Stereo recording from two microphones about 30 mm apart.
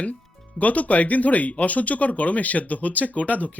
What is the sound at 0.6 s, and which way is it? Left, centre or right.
Speech, left.